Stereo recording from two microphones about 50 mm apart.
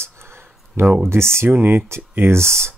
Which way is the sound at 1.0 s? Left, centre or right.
Right.